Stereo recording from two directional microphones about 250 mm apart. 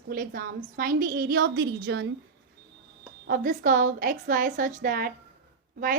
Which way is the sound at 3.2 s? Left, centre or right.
Right.